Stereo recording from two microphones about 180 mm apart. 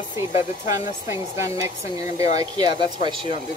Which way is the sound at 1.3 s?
15° right (ahead or behind).